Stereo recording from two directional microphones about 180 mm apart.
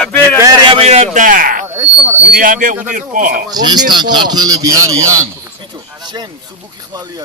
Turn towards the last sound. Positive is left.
turn(degrees=-25)  # may be behind; listen again after turning